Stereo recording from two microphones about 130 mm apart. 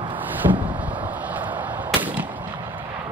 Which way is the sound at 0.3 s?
15° right (ahead or behind).